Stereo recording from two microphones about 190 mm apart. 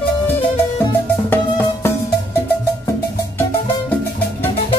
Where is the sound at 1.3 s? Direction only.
10° left (ahead or behind).